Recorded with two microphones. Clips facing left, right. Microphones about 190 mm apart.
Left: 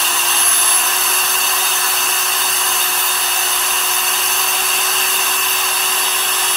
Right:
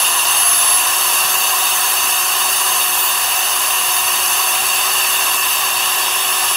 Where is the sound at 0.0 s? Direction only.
Centre (ahead or behind).